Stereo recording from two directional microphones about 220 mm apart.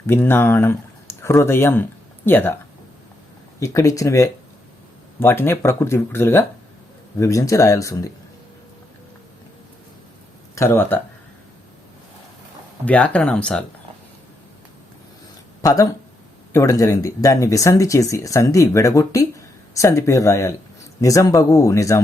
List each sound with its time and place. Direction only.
0.1 s speech: 10° left (ahead or behind)
3.6 s speech: 15° left (ahead or behind)
10.5 s speech: 10° left (ahead or behind)
12.8 s speech: 5° left (ahead or behind)
15.6 s speech: 15° left (ahead or behind)